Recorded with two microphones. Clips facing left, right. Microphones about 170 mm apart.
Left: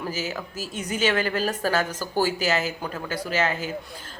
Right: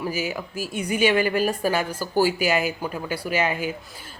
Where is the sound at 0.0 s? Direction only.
10° right (ahead or behind).